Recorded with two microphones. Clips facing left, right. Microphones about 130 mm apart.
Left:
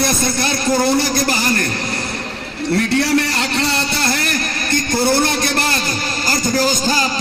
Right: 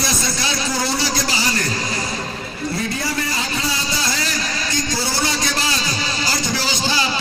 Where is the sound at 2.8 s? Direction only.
70° left (ahead or behind); by 7.2 s 45° left (ahead or behind).